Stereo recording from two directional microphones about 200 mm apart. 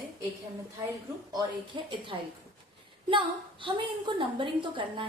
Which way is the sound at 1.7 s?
25° right (ahead or behind).